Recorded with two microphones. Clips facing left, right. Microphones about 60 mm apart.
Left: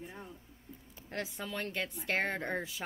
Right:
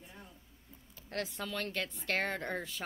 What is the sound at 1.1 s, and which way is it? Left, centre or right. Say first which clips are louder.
A woman's voice: right 1 dB; centre.